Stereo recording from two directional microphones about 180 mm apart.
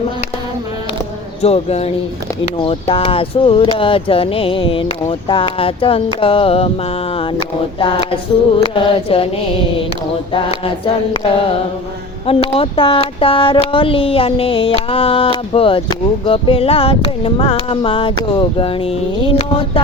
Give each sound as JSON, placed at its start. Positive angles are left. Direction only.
{"t": 1.4, "sound": "speech", "side_deg": 35}
{"t": 10.3, "sound": "speech", "side_deg": 30}